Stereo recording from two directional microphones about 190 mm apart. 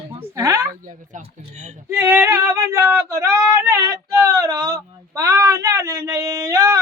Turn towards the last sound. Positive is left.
turn(degrees=-15)  # may be behind; listen again after turning